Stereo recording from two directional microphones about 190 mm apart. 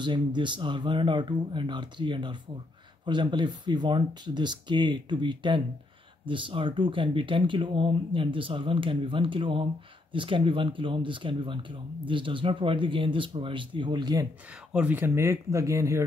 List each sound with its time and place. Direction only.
0.0 s speech: 25° right (ahead or behind)
14.7 s speech: 5° right (ahead or behind)